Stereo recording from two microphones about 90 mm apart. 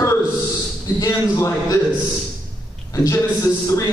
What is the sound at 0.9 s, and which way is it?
Speech, 40° left (ahead or behind).